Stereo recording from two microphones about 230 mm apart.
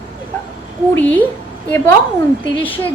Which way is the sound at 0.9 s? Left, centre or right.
Centre.